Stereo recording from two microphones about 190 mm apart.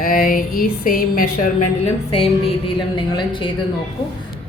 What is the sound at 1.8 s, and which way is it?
A woman's voice, 30° left (ahead or behind).